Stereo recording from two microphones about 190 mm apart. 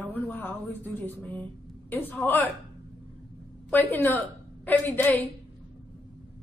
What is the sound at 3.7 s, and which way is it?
A woman's voice, 10° left (ahead or behind).